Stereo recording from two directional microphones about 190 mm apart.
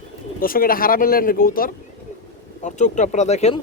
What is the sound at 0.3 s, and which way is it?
Speech, 50° left (ahead or behind).